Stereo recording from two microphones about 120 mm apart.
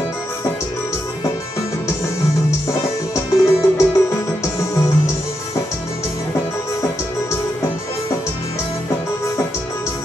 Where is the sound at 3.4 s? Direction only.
25° left (ahead or behind).